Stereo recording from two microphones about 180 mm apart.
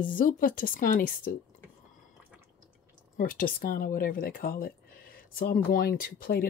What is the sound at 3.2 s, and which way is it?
Speech, 50° left (ahead or behind).